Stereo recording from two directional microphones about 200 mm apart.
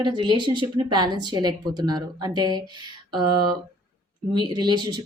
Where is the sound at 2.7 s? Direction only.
20° right (ahead or behind).